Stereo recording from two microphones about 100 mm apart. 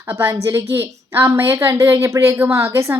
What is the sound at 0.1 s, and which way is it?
A woman's voice, 20° right (ahead or behind).